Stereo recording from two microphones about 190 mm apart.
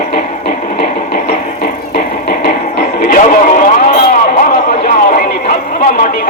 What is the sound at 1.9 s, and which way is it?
Music, 50° left (ahead or behind).